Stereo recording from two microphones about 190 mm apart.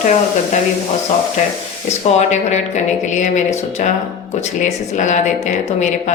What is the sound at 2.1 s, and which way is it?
Speech, 40° left (ahead or behind).